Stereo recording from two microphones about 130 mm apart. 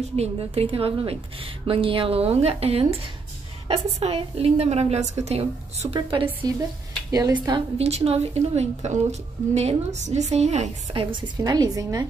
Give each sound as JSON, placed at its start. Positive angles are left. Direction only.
{"t": 0.1, "sound": "a woman's voice", "side_deg": -50}
{"t": 5.9, "sound": "a woman's voice", "side_deg": -40}
{"t": 7.7, "sound": "a woman's voice", "side_deg": -50}
{"t": 11.1, "sound": "a woman's voice", "side_deg": -30}